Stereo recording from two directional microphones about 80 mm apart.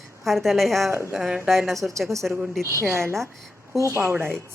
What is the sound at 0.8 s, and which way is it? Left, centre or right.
Speech, right.